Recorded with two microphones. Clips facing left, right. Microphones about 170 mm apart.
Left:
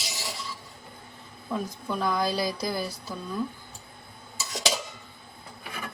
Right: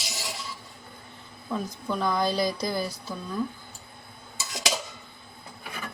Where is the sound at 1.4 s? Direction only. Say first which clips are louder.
Right 1 dB; centre (ahead or behind).